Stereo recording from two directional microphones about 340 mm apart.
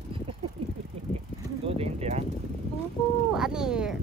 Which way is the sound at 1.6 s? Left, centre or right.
Centre.